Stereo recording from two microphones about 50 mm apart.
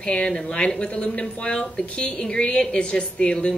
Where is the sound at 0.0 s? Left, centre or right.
Centre.